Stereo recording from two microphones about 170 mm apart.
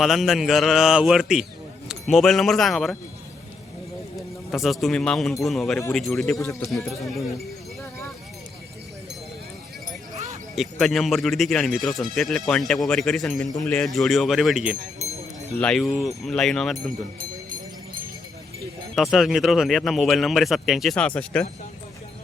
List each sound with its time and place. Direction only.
0.0 s speech: centre (ahead or behind)
4.5 s speech: centre (ahead or behind)
6.1 s speech: 15° left (ahead or behind)
6.7 s speech: centre (ahead or behind)
10.5 s speech: centre (ahead or behind)
18.9 s speech: centre (ahead or behind)